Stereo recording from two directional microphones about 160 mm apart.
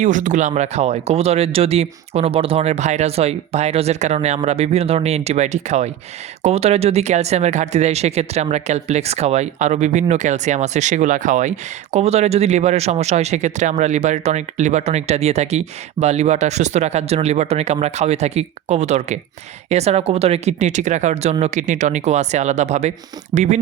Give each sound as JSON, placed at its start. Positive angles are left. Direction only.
{"t": 0.0, "sound": "speech", "side_deg": -50}